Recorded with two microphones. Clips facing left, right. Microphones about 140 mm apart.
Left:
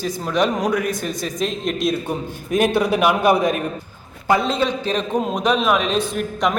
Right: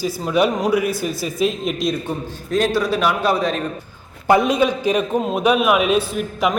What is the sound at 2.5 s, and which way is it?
A man's voice, 15° left (ahead or behind).